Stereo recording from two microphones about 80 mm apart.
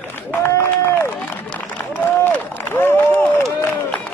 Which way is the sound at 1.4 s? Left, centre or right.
Centre.